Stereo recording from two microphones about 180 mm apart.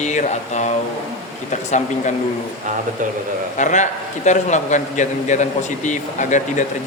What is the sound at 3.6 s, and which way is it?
A man's voice, 45° left (ahead or behind).